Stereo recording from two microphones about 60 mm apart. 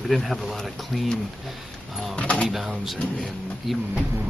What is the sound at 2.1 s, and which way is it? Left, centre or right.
Speech, left.